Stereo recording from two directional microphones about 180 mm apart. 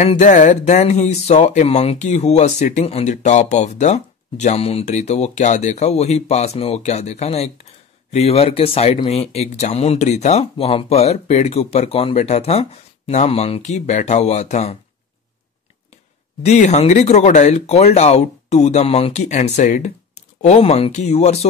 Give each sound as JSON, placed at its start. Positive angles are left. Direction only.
{"t": 0.0, "sound": "speech", "side_deg": 40}
{"t": 16.4, "sound": "speech", "side_deg": 40}